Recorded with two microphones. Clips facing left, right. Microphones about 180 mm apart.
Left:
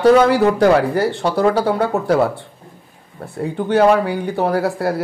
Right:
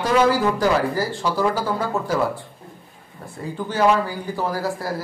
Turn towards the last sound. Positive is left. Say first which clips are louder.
# left 7 dB
turn(degrees=65)  # may be behind; listen again after turning